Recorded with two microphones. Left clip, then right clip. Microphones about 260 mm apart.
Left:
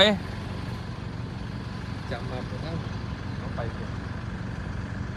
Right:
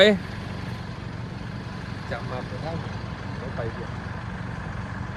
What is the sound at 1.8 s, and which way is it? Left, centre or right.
Vehicle, right.